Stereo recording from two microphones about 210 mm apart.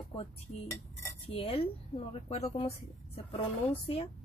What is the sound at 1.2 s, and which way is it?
Speech, 25° left (ahead or behind).